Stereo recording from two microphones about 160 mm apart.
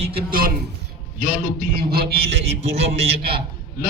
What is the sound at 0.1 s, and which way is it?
Speech, 75° right (ahead or behind).